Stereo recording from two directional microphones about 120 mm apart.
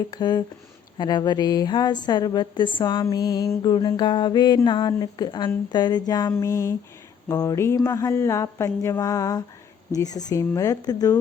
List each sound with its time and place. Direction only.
0.1 s a woman's voice: 35° left (ahead or behind)